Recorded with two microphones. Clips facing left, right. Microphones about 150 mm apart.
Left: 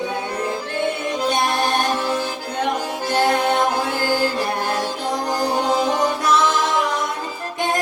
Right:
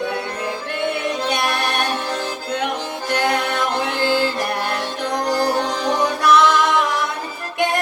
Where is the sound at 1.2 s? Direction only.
65° right (ahead or behind).